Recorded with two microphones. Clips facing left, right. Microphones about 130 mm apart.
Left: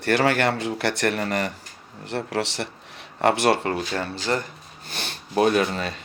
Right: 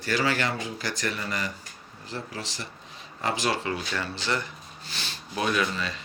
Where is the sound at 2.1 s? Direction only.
70° left (ahead or behind).